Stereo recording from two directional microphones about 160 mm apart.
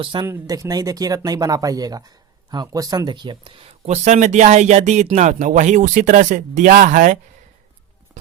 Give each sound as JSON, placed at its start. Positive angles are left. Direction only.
{"t": 0.0, "sound": "speech", "side_deg": -30}
{"t": 0.3, "sound": "speech", "side_deg": -20}